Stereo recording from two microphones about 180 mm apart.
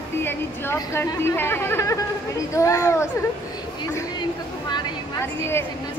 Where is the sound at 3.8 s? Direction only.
25° left (ahead or behind).